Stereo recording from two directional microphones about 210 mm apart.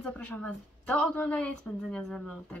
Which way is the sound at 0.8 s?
10° left (ahead or behind).